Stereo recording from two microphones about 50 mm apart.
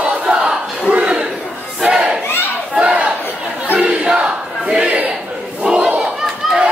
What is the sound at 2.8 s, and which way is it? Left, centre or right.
Battle cry, right.